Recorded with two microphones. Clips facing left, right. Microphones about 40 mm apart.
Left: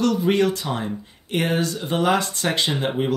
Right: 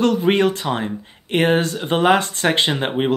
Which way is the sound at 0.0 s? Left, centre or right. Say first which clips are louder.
Right 3 dB; right.